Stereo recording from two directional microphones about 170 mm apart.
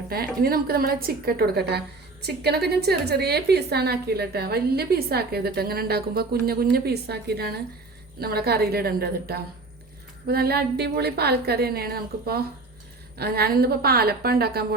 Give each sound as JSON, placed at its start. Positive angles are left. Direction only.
{"t": 0.1, "sound": "a woman's voice", "side_deg": -65}